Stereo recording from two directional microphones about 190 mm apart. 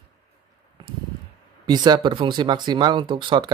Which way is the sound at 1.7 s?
20° right (ahead or behind).